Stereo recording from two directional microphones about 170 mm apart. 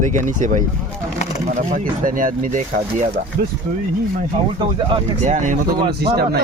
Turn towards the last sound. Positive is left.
turn(degrees=-55)  # may be behind; listen again after turning